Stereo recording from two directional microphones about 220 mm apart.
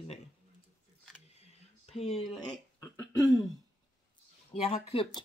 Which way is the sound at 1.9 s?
30° left (ahead or behind).